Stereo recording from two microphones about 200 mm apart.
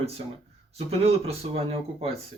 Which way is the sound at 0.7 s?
30° right (ahead or behind).